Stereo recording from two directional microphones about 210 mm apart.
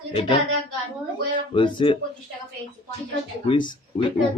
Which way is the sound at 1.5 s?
25° left (ahead or behind).